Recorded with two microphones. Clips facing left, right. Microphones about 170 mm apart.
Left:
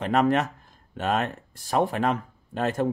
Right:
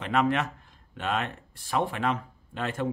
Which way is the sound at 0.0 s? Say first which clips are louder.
Left 4 dB; 40° left (ahead or behind).